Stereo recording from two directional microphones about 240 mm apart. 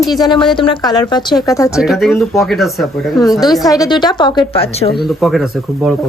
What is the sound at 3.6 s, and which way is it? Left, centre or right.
A woman's voice, centre.